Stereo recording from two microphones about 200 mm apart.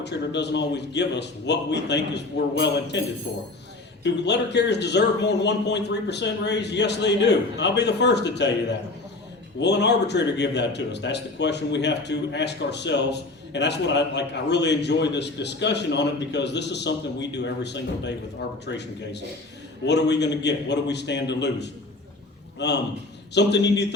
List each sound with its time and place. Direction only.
0.0 s a man's voice: 60° left (ahead or behind)
4.0 s a man's voice: 60° left (ahead or behind)